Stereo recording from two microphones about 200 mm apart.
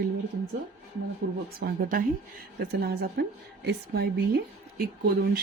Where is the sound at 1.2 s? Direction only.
55° right (ahead or behind).